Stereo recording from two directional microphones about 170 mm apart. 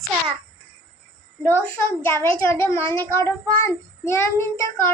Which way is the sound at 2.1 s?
15° left (ahead or behind).